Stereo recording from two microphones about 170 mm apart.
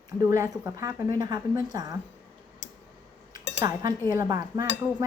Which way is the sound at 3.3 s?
20° right (ahead or behind).